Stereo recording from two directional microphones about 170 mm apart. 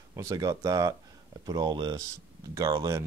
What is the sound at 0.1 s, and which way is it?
Speech, 15° right (ahead or behind).